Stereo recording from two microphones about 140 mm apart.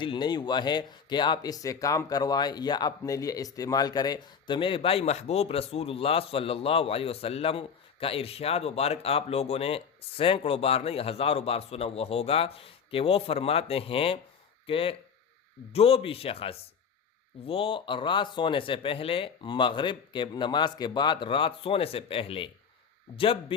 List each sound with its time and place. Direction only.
0.0 s speech: 35° left (ahead or behind)